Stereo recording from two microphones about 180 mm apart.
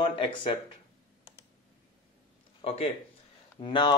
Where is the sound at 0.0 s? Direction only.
30° left (ahead or behind).